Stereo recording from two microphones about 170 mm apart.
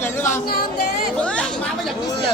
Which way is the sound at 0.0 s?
15° left (ahead or behind).